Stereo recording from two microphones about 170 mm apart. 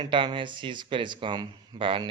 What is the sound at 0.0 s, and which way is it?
Speech, 30° right (ahead or behind).